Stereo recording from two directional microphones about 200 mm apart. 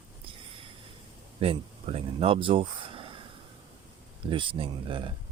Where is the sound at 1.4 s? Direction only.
30° right (ahead or behind).